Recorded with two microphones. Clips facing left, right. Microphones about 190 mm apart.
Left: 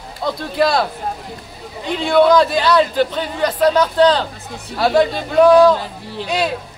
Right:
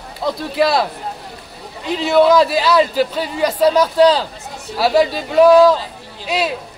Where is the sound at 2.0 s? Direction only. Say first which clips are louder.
Even; 5° right (ahead or behind).